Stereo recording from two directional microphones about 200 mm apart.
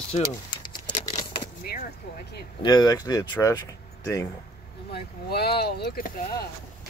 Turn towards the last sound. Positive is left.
turn(degrees=50)  # may be behind; listen again after turning